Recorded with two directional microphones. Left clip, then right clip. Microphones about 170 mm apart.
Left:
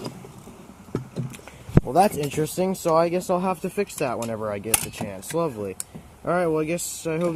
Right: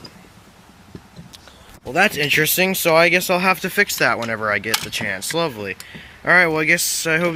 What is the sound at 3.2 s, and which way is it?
Speech, 45° right (ahead or behind).